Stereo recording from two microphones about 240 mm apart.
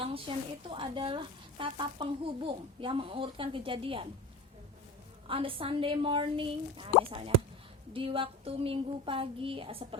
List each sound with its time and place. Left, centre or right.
0.0 s a woman's voice: right
5.3 s a woman's voice: right
7.9 s a woman's voice: right